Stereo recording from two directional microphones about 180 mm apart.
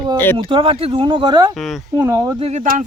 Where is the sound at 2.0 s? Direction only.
15° right (ahead or behind).